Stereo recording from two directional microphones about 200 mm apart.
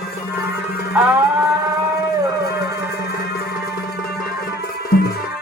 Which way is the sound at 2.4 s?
55° left (ahead or behind).